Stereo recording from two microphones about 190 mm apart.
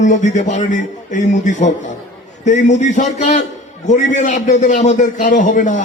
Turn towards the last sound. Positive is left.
turn(degrees=40)  # may be behind; listen again after turning